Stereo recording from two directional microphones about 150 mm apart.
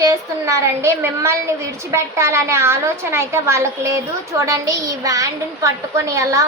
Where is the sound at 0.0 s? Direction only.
20° right (ahead or behind).